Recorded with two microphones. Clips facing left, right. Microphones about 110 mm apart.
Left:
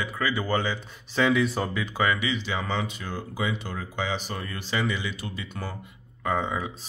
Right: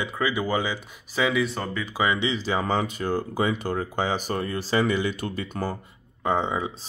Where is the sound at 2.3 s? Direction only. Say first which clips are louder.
Right 4 dB; 40° right (ahead or behind).